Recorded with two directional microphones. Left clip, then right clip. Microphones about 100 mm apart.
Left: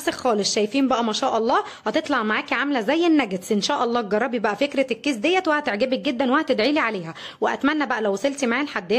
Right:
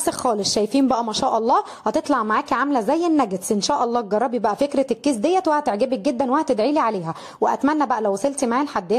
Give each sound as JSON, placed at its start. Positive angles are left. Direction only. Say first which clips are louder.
{"t": 0.0, "sound": "a woman's voice", "louder": "right 1 dB", "side_deg": -45}
{"t": 4.6, "sound": "a woman's voice", "louder": "right 2 dB", "side_deg": -45}
{"t": 7.3, "sound": "speech", "louder": "right 2 dB", "side_deg": 0}